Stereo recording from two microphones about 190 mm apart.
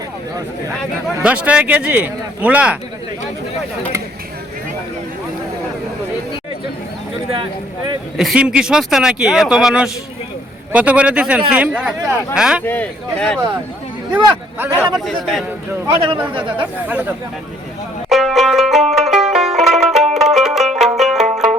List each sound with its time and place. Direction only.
1.0 s speech: 5° right (ahead or behind)
8.1 s speech: centre (ahead or behind)
12.6 s speech: 10° left (ahead or behind)
14.9 s speech: centre (ahead or behind)
15.9 s speech: 25° right (ahead or behind)
16.9 s speech: 10° right (ahead or behind)
18.1 s music: centre (ahead or behind)